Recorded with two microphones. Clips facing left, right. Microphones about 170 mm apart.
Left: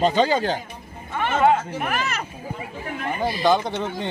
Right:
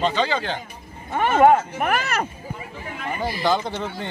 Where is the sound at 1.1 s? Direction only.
50° right (ahead or behind).